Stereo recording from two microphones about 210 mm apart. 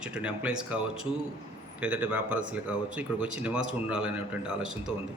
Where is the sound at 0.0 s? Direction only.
5° right (ahead or behind).